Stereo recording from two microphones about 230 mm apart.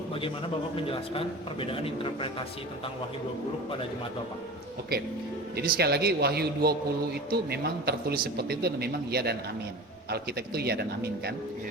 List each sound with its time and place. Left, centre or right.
0.8 s speech: left
5.5 s a man's voice: right